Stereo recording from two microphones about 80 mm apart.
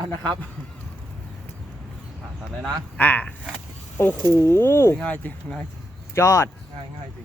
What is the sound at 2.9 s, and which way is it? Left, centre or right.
Speech, centre.